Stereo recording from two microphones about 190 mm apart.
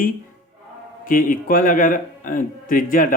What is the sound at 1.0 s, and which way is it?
Speech, 45° left (ahead or behind).